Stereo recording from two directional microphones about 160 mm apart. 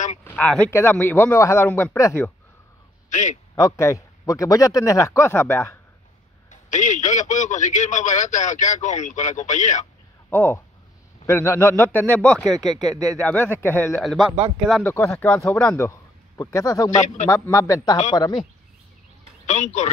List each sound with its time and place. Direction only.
0.2 s speech: 10° left (ahead or behind)
3.1 s a man's voice: 50° left (ahead or behind)
3.5 s a man's voice: 20° left (ahead or behind)
6.5 s a man's voice: 50° left (ahead or behind)
10.3 s speech: 15° left (ahead or behind)
12.9 s speech: 20° right (ahead or behind)
13.2 s speech: 10° left (ahead or behind)
13.9 s speech: centre (ahead or behind)
14.8 s a man's voice: 10° left (ahead or behind)
16.9 s a man's voice: 50° left (ahead or behind)
17.3 s a man's voice: 25° left (ahead or behind)
19.4 s a man's voice: 50° left (ahead or behind)